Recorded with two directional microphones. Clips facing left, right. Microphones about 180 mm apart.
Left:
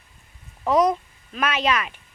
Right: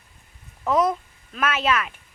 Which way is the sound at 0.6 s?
15° left (ahead or behind).